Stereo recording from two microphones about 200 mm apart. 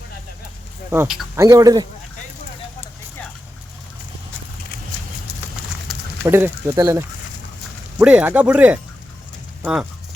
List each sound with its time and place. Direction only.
0.9 s speech: 5° right (ahead or behind)
5.9 s a sound: centre (ahead or behind)
6.2 s speech: 15° right (ahead or behind)